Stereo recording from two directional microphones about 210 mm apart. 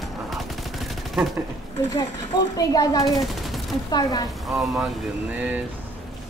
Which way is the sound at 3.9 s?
20° left (ahead or behind).